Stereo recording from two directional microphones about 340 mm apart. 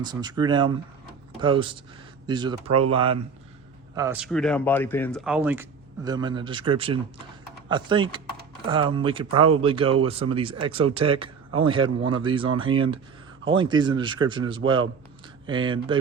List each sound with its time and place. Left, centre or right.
0.0 s speech: centre
9.4 s speech: right
9.6 s speech: centre